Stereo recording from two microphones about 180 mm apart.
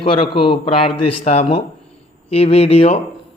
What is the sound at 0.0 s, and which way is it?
A man's voice, 30° left (ahead or behind).